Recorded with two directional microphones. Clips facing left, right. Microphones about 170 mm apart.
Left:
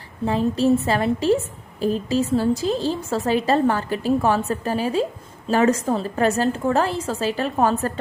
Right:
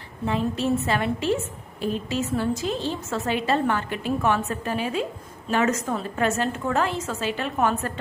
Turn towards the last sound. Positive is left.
turn(degrees=35)  # may be behind; listen again after turning